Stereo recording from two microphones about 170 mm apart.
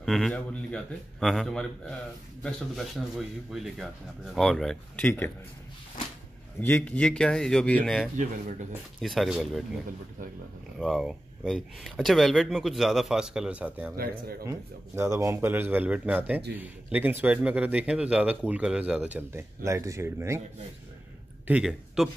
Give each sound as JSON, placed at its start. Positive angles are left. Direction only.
{"t": 0.0, "sound": "speech", "side_deg": 0}
{"t": 6.6, "sound": "speech", "side_deg": 10}
{"t": 10.8, "sound": "speech", "side_deg": 0}
{"t": 13.9, "sound": "speech", "side_deg": -65}
{"t": 15.0, "sound": "speech", "side_deg": -15}
{"t": 21.5, "sound": "speech", "side_deg": -5}